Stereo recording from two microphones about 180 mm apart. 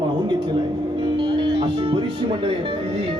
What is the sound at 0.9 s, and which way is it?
Speech, 25° right (ahead or behind).